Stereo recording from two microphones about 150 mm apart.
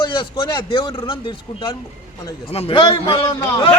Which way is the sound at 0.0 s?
30° left (ahead or behind).